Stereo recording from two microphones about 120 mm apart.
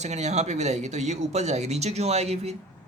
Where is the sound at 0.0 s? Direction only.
70° right (ahead or behind).